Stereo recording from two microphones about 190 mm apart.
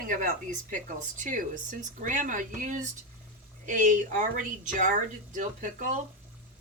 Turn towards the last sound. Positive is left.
turn(degrees=-40)  # may be behind; listen again after turning